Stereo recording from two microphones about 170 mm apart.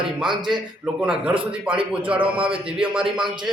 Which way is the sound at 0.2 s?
Centre (ahead or behind).